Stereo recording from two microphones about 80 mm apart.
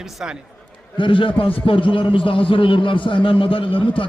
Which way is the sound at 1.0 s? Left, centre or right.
Left.